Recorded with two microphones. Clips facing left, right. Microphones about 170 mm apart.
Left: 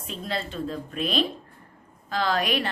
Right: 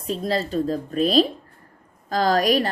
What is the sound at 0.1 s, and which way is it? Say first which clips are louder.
A woman's voice: right 8 dB; 40° right (ahead or behind).